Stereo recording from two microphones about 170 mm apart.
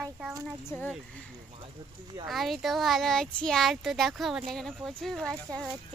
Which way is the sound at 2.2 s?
Centre (ahead or behind).